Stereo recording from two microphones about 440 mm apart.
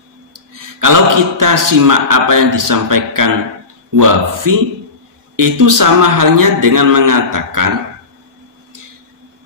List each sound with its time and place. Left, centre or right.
0.3 s a man's voice: right